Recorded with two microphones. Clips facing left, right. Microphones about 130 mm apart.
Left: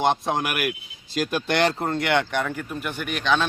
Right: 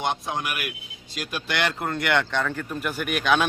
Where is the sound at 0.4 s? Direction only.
50° left (ahead or behind).